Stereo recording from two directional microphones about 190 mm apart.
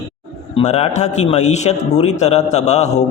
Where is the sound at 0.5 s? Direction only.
35° left (ahead or behind).